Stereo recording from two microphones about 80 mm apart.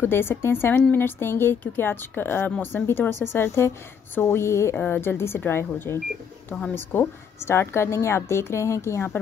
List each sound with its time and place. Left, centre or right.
0.0 s a woman's voice: left